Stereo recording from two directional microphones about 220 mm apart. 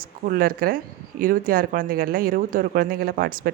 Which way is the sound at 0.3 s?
40° right (ahead or behind).